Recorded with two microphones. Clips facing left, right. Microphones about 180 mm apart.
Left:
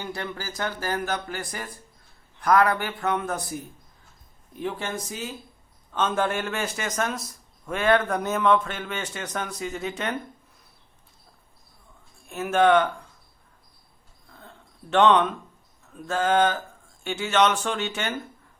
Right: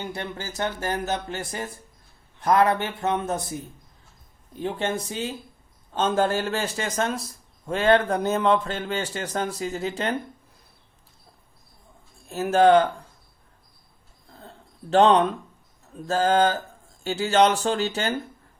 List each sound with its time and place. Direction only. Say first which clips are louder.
0.0 s speech: right 1 dB; 25° right (ahead or behind)
12.3 s speech: right 3 dB; 35° right (ahead or behind)
14.3 s a sound: right 3 dB; 35° right (ahead or behind)
15.9 s speech: right 2 dB; 35° right (ahead or behind)